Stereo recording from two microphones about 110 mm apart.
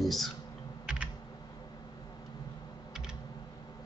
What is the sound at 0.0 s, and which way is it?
Speech, centre (ahead or behind).